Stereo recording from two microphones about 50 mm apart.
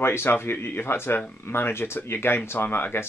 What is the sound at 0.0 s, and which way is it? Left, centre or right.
Speech, left.